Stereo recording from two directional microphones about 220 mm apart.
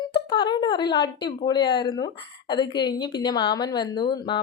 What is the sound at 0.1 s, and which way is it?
A woman's voice, 20° left (ahead or behind).